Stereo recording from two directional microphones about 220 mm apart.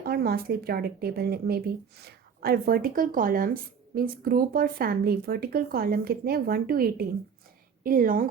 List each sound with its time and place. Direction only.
0.0 s a woman's voice: 45° right (ahead or behind)